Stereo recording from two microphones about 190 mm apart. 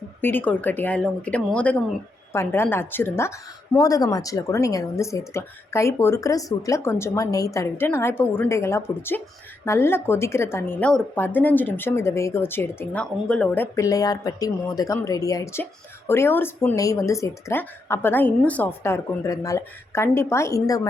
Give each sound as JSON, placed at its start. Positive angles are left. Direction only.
{"t": 0.2, "sound": "a woman's voice", "side_deg": 10}